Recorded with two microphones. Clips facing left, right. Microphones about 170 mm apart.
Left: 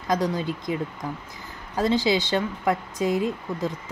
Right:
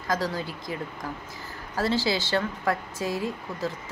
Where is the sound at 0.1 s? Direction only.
20° left (ahead or behind).